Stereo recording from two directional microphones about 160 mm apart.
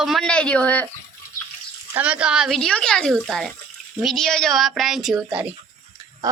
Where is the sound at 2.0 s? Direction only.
10° right (ahead or behind).